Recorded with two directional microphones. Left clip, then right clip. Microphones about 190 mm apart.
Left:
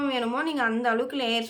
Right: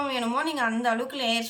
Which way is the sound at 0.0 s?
10° left (ahead or behind).